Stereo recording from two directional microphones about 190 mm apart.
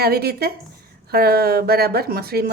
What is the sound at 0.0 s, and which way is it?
Speech, 55° right (ahead or behind).